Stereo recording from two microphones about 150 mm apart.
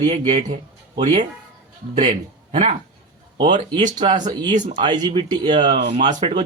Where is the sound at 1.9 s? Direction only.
45° right (ahead or behind).